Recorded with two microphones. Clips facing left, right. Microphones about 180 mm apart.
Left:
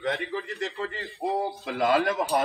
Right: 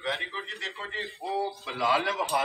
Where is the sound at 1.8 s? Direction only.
50° left (ahead or behind).